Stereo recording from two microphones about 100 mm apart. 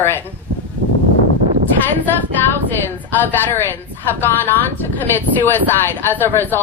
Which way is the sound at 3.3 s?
20° left (ahead or behind).